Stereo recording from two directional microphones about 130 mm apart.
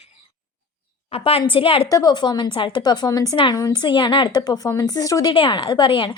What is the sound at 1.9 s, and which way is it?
A woman's voice, 30° left (ahead or behind).